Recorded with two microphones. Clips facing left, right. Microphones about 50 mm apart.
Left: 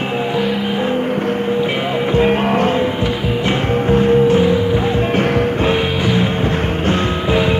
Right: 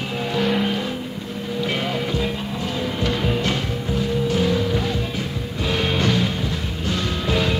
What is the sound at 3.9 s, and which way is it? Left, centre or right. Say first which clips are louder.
Music: left 11 dB; left.